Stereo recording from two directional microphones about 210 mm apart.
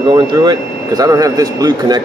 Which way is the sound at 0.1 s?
20° right (ahead or behind).